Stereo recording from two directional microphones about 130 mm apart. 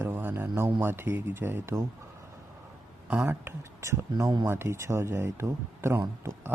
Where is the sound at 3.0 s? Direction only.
15° right (ahead or behind).